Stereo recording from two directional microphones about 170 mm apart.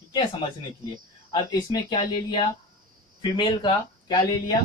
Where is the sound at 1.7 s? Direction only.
25° left (ahead or behind).